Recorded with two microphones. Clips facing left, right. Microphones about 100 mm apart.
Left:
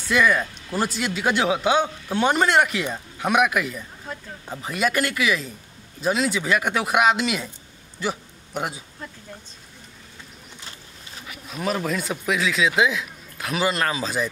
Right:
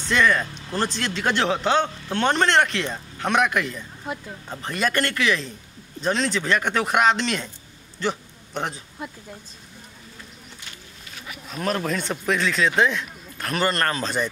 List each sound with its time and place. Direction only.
0.1 s a man's voice: 10° left (ahead or behind)
8.0 s a sound: 10° left (ahead or behind)
11.4 s speech: 5° left (ahead or behind)